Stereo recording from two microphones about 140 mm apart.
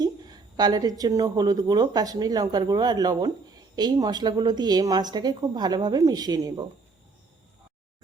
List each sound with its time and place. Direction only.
0.0 s a woman's voice: 30° right (ahead or behind)